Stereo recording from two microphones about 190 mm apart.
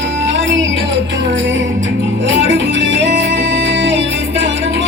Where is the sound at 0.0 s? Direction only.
70° right (ahead or behind).